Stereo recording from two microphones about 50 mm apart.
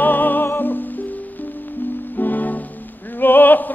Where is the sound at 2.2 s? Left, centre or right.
Left.